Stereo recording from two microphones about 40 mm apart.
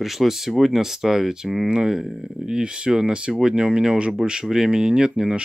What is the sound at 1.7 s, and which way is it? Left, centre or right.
Speech, right.